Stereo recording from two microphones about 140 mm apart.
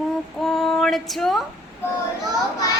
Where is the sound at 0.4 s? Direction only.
Centre (ahead or behind).